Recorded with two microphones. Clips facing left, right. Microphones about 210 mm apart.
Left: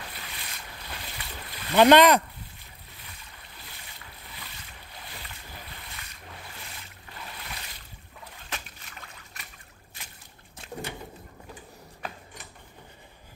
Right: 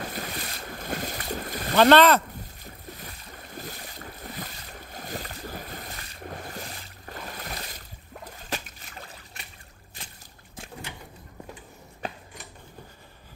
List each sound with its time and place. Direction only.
0.0 s boat: 45° right (ahead or behind)
1.8 s speech: 15° left (ahead or behind)
2.6 s boat: 45° right (ahead or behind)
8.5 s a sound: 35° right (ahead or behind)